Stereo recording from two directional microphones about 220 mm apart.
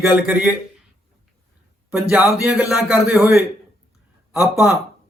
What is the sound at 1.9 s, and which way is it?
A man's voice, 5° right (ahead or behind).